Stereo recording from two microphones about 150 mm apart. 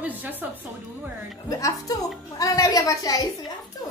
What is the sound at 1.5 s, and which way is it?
A woman's voice, 20° left (ahead or behind).